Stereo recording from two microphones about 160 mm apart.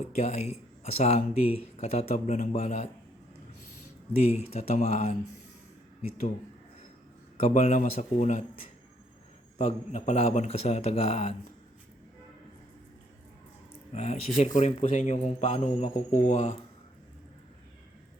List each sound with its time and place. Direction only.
0.0 s speech: 40° left (ahead or behind)
4.2 s a man's voice: 40° left (ahead or behind)
7.3 s a man's voice: 45° left (ahead or behind)
9.6 s speech: 40° left (ahead or behind)
13.9 s a man's voice: 40° left (ahead or behind)